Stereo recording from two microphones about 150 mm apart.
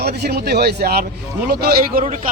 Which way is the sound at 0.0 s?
90° right.